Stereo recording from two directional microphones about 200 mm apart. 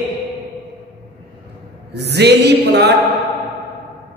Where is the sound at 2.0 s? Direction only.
55° right (ahead or behind).